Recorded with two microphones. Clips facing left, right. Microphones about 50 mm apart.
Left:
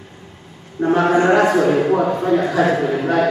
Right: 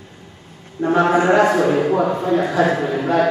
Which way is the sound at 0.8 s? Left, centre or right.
Left.